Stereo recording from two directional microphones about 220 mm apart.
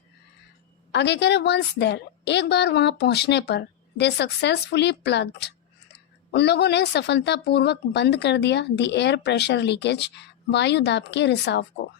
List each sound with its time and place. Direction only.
0.9 s a woman's voice: 50° left (ahead or behind)